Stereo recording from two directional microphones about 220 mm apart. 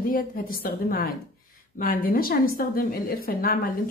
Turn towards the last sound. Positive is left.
turn(degrees=40)  # may be behind; listen again after turning